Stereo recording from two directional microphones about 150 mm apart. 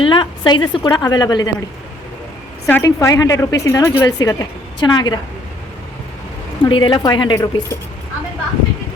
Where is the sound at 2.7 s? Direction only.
15° left (ahead or behind).